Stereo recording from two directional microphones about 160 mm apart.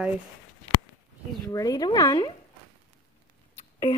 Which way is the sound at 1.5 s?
20° left (ahead or behind).